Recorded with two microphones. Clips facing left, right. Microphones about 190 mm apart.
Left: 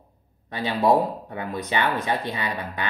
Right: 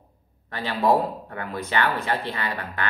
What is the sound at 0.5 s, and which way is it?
Speech, 15° left (ahead or behind).